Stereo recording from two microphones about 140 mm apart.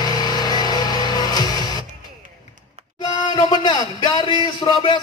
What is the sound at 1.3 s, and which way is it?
Music, 30° left (ahead or behind).